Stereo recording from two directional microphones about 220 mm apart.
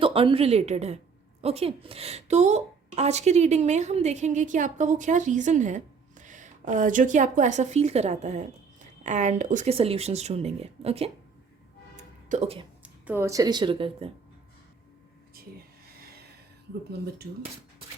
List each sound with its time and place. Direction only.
0.0 s a woman's voice: 25° right (ahead or behind)
12.3 s a woman's voice: 30° right (ahead or behind)
12.8 s speech: 10° right (ahead or behind); by 14.1 s 25° right (ahead or behind)
15.4 s a sound: 45° right (ahead or behind)